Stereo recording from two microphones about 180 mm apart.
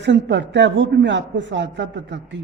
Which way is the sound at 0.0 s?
75° right (ahead or behind).